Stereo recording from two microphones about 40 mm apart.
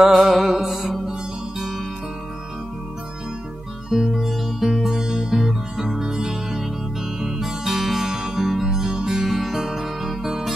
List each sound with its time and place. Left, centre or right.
0.0 s music: centre
3.9 s music: centre
8.1 s music: right
8.4 s music: centre